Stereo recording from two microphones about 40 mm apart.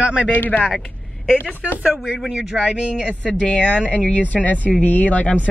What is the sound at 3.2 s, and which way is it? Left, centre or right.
Speech, left.